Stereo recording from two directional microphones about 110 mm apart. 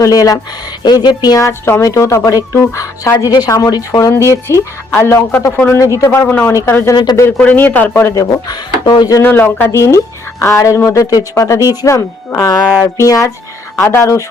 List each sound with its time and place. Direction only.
0.0 s speech: 30° left (ahead or behind)
6.1 s speech: 15° left (ahead or behind)
6.9 s speech: 40° left (ahead or behind)
7.3 s speech: 15° left (ahead or behind)
8.1 s speech: 35° left (ahead or behind)
9.2 s speech: 20° left (ahead or behind)